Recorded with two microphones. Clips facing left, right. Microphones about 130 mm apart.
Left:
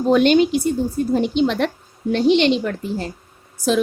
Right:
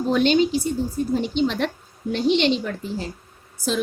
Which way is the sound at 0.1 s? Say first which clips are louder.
Left 4 dB; 55° left (ahead or behind).